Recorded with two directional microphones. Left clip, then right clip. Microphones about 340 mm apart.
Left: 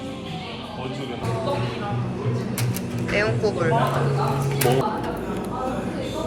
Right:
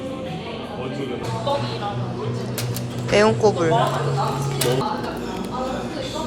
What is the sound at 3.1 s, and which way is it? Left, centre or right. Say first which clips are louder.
Speech: right 6 dB; centre.